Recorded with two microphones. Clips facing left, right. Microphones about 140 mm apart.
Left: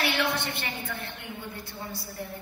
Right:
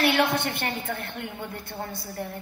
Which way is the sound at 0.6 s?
50° right (ahead or behind).